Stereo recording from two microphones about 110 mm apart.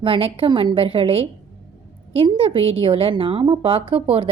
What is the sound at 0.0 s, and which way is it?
A woman's voice, 60° right (ahead or behind).